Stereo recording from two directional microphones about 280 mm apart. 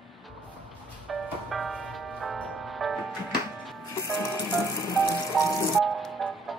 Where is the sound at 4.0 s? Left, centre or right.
Centre.